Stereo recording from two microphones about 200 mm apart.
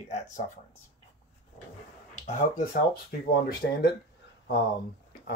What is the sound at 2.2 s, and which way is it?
Speech, 40° left (ahead or behind).